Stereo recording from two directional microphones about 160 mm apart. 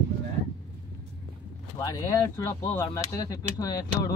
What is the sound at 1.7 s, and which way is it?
Speech, 20° left (ahead or behind).